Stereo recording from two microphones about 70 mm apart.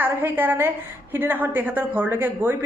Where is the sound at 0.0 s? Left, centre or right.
Right.